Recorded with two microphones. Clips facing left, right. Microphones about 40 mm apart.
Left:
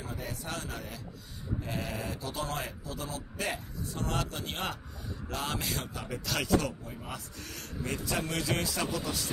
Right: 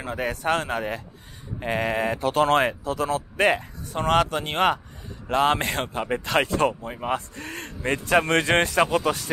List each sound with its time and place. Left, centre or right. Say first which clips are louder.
0.0 s a man's voice: right 13 dB; right
6.8 s a man's voice: right 14 dB; right
8.1 s a man's voice: right 13 dB; right